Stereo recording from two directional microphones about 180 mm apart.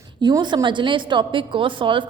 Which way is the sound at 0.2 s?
25° right (ahead or behind).